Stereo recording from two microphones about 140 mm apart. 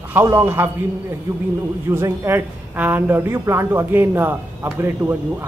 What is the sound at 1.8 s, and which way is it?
Speech, 20° right (ahead or behind).